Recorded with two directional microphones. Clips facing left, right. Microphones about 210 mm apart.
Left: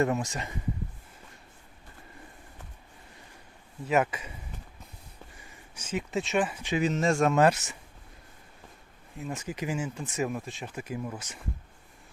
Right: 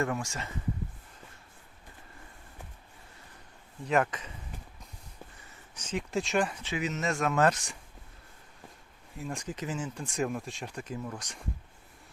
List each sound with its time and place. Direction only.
0.0 s speech: 20° left (ahead or behind)
3.8 s speech: 5° left (ahead or behind)
5.7 s speech: 5° left (ahead or behind)
6.7 s speech: 30° left (ahead or behind)
7.3 s speech: 10° left (ahead or behind)
9.1 s speech: 5° left (ahead or behind)